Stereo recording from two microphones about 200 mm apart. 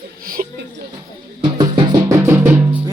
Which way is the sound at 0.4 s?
40° right (ahead or behind).